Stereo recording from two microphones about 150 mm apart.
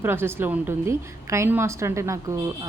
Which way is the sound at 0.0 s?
15° right (ahead or behind).